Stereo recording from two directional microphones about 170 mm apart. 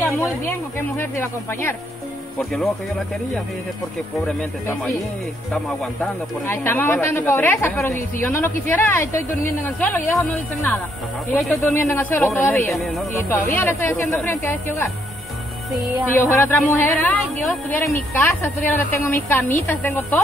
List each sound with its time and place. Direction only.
0.0 s a woman's voice: 15° left (ahead or behind)
4.4 s a woman's voice: 10° left (ahead or behind)
6.4 s a woman's voice: 15° left (ahead or behind)
12.7 s speech: centre (ahead or behind)
13.3 s a woman's voice: 10° left (ahead or behind)
15.7 s speech: 5° right (ahead or behind)
16.1 s a woman's voice: 15° left (ahead or behind)
17.2 s a woman's voice: centre (ahead or behind)